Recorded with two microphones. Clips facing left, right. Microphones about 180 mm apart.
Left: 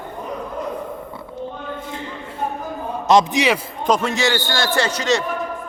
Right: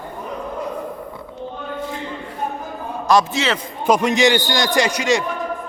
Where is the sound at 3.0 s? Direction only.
20° left (ahead or behind).